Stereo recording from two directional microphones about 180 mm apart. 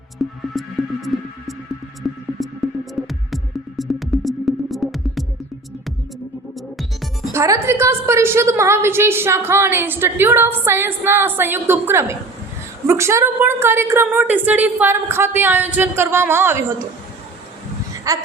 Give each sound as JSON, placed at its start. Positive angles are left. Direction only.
{"t": 0.2, "sound": "music", "side_deg": 0}
{"t": 2.0, "sound": "music", "side_deg": 0}
{"t": 7.3, "sound": "a woman's voice", "side_deg": -15}
{"t": 18.1, "sound": "speech", "side_deg": -20}